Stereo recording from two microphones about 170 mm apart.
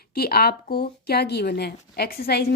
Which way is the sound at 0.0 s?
65° left (ahead or behind).